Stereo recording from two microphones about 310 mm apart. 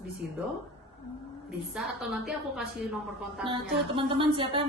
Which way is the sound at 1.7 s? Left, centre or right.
Centre.